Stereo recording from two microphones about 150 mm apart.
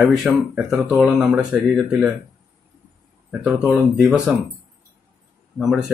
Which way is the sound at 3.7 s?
5° right (ahead or behind).